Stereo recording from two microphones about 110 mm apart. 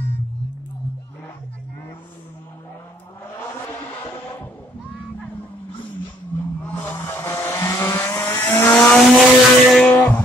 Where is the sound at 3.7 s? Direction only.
20° left (ahead or behind).